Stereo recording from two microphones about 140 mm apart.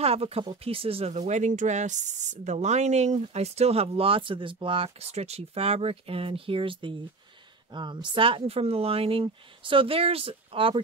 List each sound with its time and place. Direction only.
0.0 s speech: 45° right (ahead or behind)